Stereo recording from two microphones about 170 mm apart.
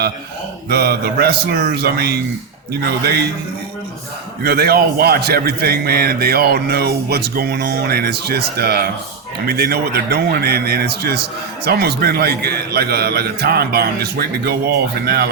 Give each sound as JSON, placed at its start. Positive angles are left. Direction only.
{"t": 0.7, "sound": "a man's voice", "side_deg": -70}
{"t": 4.4, "sound": "a man's voice", "side_deg": -70}